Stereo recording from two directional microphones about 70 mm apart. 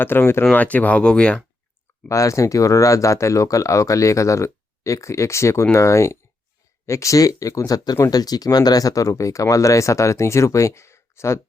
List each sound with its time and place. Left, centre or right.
0.0 s speech: left
0.5 s speech: left
2.0 s speech: left
8.1 s speech: left